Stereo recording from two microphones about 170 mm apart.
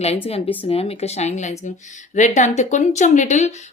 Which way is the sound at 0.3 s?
35° left (ahead or behind).